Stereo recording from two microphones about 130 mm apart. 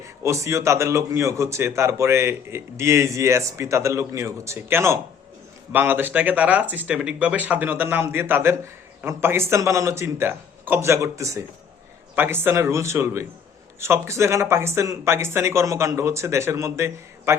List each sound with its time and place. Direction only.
0.2 s speech: 25° right (ahead or behind)